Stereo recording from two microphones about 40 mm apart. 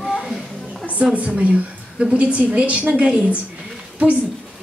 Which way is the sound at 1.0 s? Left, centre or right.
Right.